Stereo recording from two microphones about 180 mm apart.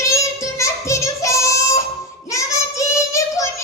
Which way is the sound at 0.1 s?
15° left (ahead or behind).